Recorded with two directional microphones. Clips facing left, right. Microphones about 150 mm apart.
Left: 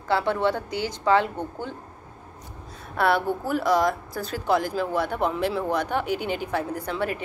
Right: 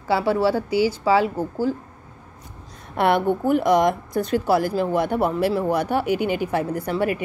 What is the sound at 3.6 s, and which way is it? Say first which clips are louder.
Speech: even; 20° right (ahead or behind).